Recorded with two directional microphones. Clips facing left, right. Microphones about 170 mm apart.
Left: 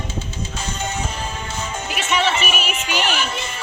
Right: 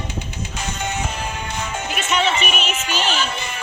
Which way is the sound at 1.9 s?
5° left (ahead or behind).